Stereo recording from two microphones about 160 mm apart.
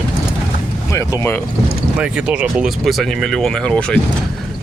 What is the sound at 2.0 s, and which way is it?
Speech, 5° right (ahead or behind).